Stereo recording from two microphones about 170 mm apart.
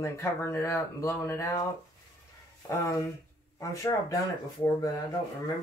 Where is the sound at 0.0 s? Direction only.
15° left (ahead or behind).